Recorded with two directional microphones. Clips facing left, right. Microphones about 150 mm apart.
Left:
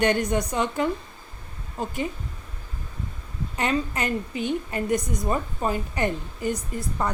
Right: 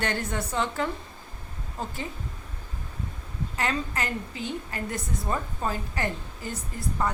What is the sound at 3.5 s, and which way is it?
A woman's voice, 20° left (ahead or behind).